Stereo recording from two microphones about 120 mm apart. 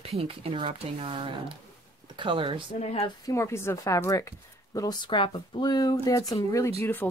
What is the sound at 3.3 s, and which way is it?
Speech, 25° left (ahead or behind).